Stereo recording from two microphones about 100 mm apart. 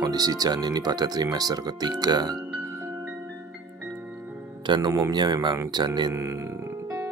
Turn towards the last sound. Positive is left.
turn(degrees=-30)  # may be behind; listen again after turning